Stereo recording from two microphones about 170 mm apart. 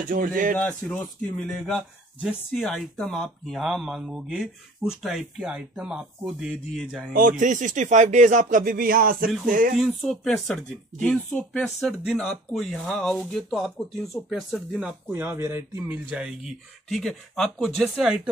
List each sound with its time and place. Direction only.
0.1 s speech: 55° right (ahead or behind)
0.6 s speech: 10° left (ahead or behind)
7.2 s speech: 50° right (ahead or behind)
10.0 s speech: centre (ahead or behind)